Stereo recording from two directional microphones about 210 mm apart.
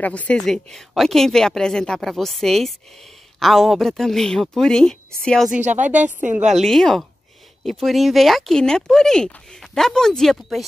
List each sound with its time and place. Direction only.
0.0 s speech: 5° left (ahead or behind)
5.6 s speech: 35° right (ahead or behind)
6.5 s speech: centre (ahead or behind)